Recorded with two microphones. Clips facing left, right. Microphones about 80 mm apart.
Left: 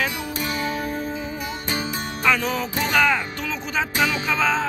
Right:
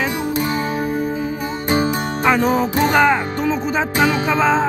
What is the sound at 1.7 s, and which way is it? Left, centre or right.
Music, right.